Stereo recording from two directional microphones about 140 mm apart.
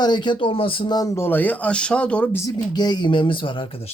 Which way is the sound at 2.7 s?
30° left (ahead or behind).